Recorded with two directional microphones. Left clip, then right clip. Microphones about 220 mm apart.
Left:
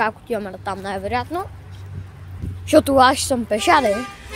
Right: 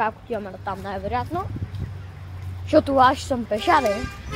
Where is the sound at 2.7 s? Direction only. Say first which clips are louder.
Left 3 dB; 30° left (ahead or behind).